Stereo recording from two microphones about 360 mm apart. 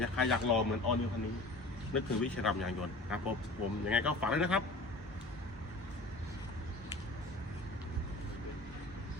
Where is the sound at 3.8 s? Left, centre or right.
Centre.